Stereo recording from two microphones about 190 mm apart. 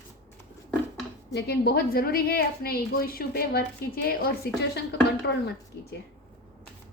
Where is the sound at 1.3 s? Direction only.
60° left (ahead or behind).